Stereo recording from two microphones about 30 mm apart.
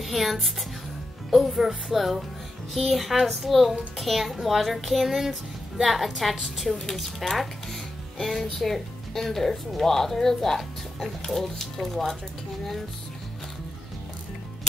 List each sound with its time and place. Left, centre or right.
0.0 s a woman's voice: centre